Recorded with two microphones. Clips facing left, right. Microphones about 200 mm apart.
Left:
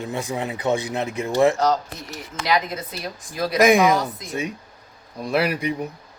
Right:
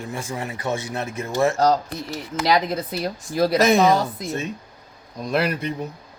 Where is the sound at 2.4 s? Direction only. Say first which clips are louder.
Right 2 dB; 35° right (ahead or behind).